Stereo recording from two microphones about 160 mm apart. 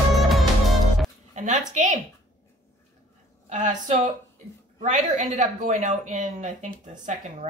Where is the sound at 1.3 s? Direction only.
50° right (ahead or behind).